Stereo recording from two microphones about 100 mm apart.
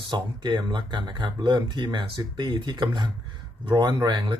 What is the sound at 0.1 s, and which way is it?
Speech, 50° right (ahead or behind).